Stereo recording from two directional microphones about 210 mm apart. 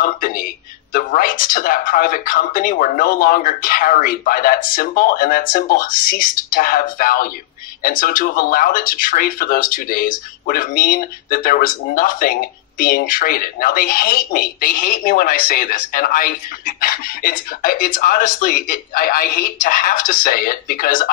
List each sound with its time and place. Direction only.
0.0 s speech: 40° left (ahead or behind)